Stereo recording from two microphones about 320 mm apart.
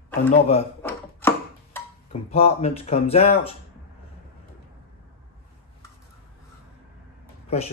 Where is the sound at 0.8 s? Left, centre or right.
Centre.